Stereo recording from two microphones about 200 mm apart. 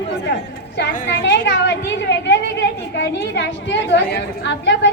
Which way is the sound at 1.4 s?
60° left (ahead or behind).